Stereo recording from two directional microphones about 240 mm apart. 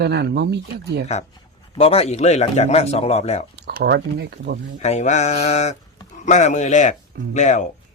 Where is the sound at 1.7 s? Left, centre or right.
Left.